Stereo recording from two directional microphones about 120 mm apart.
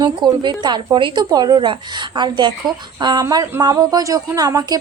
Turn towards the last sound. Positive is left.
turn(degrees=-30)  # may be behind; listen again after turning